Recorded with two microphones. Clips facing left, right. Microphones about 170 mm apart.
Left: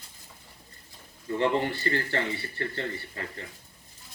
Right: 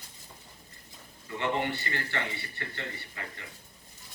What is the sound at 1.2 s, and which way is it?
Speech, 35° left (ahead or behind).